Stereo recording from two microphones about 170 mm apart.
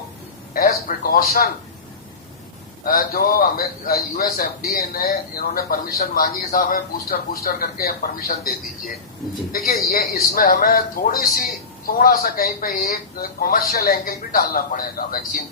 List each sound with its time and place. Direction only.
0.5 s a man's voice: 60° left (ahead or behind)
2.8 s a man's voice: 60° left (ahead or behind)